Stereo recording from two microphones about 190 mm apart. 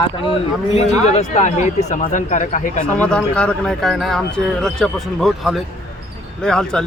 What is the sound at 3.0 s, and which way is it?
Speech, 5° left (ahead or behind).